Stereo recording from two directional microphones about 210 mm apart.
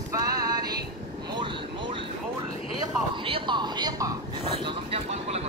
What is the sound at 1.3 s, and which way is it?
Vehicle, 25° right (ahead or behind).